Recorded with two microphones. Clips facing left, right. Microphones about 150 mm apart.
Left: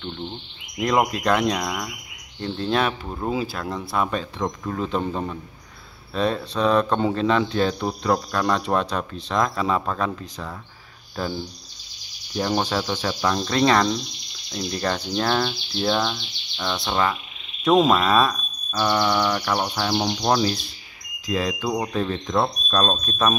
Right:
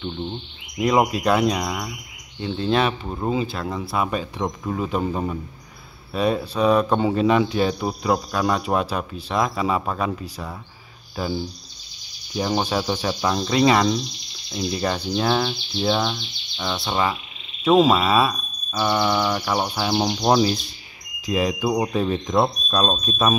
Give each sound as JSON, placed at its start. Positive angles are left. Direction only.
{"t": 0.0, "sound": "speech", "side_deg": -10}
{"t": 12.4, "sound": "speech", "side_deg": -10}